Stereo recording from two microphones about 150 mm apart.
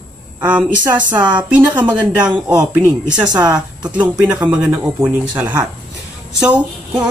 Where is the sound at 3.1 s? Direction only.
25° right (ahead or behind).